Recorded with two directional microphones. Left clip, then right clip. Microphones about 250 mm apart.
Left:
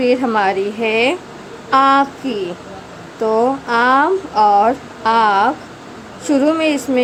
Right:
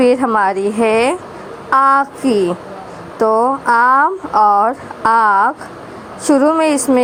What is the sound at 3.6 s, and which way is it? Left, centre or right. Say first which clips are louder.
Speech: right 4 dB; centre.